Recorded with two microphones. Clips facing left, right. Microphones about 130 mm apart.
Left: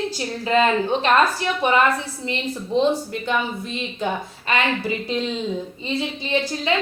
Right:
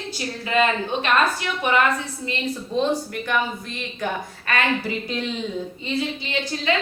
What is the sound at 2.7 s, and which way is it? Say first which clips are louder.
A woman's voice: left 3 dB; 20° left (ahead or behind).